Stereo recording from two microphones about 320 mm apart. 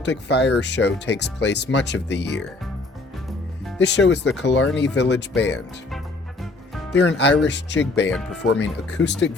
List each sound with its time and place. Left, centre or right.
0.0 s speech: left
3.8 s speech: left
6.4 s music: centre
7.0 s speech: left